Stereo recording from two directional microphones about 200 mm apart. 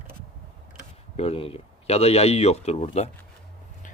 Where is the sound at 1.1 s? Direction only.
30° left (ahead or behind).